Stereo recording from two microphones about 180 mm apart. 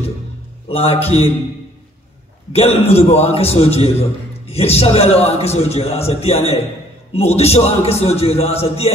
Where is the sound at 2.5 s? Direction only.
35° left (ahead or behind).